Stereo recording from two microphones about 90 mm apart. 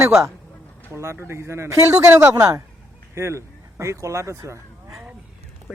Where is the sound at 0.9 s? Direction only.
30° right (ahead or behind).